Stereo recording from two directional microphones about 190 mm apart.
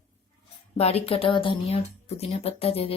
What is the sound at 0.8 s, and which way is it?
Speech, 30° left (ahead or behind).